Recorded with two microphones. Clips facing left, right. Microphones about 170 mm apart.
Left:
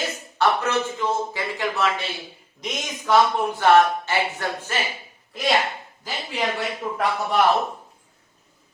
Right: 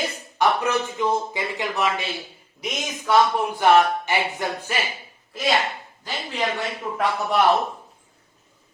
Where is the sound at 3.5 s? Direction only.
15° right (ahead or behind).